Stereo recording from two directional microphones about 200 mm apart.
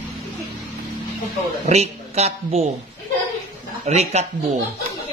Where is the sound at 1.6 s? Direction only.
35° right (ahead or behind).